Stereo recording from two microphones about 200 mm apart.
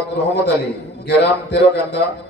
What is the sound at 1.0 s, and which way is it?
A man's voice, 60° left (ahead or behind).